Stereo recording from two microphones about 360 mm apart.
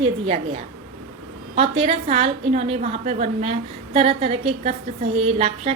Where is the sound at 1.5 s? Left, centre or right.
Centre.